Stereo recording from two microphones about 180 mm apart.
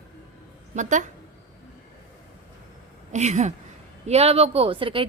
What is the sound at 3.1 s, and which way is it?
A woman's voice, 40° right (ahead or behind).